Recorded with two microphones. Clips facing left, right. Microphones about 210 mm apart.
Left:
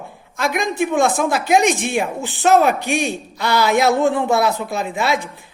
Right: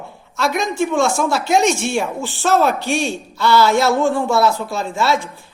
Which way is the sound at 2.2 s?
20° left (ahead or behind).